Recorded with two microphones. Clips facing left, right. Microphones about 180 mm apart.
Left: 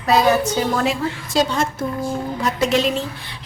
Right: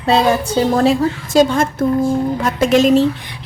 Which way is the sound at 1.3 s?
50° right (ahead or behind).